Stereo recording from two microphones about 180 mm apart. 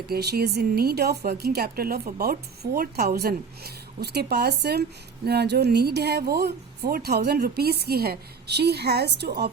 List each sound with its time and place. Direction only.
0.1 s speech: 60° right (ahead or behind)